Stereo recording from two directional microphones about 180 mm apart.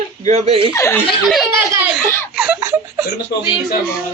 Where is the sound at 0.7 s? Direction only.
15° left (ahead or behind).